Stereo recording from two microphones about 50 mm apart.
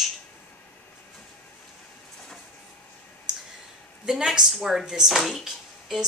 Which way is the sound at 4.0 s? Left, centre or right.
Centre.